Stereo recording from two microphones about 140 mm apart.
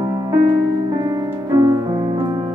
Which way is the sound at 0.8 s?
30° right (ahead or behind).